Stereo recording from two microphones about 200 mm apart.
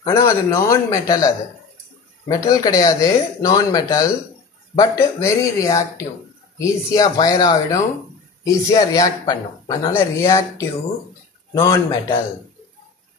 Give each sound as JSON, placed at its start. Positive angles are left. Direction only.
{"t": 0.0, "sound": "speech", "side_deg": 15}